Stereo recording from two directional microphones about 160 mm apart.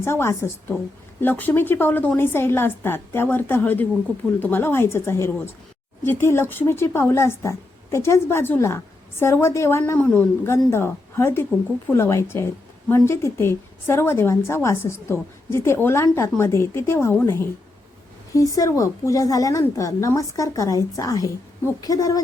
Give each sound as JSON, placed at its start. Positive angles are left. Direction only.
{"t": 0.0, "sound": "a woman's voice", "side_deg": 15}